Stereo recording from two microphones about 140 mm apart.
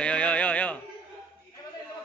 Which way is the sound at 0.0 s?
10° left (ahead or behind).